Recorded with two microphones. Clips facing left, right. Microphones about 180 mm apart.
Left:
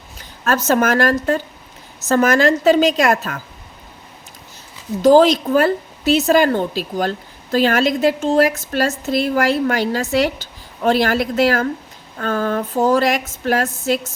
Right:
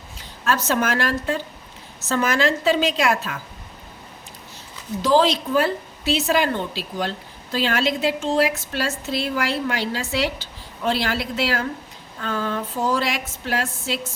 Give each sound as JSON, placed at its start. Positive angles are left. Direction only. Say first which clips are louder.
{"t": 0.4, "sound": "a woman's voice", "louder": "left 5 dB", "side_deg": 45}
{"t": 5.0, "sound": "a woman's voice", "louder": "left 7 dB", "side_deg": 45}